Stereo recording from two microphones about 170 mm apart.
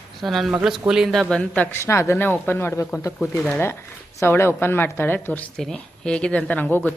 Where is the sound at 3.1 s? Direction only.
Centre (ahead or behind).